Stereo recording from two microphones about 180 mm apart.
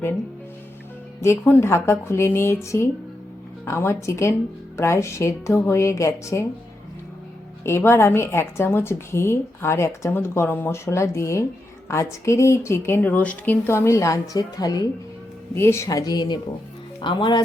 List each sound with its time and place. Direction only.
1.2 s a woman's voice: 15° left (ahead or behind)
7.6 s a woman's voice: 15° left (ahead or behind)